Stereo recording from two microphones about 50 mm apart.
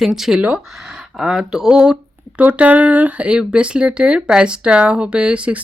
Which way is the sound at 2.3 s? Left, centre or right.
Right.